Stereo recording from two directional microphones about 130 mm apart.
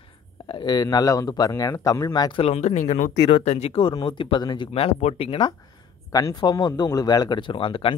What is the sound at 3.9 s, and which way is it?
Speech, 35° left (ahead or behind).